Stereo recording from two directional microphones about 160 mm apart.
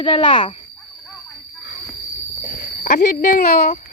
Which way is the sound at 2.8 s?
60° left (ahead or behind).